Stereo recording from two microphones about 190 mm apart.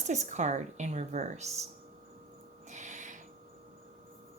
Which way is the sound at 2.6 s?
40° right (ahead or behind).